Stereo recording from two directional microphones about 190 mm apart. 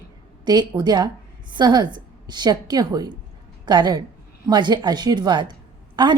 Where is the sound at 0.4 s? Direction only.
20° right (ahead or behind).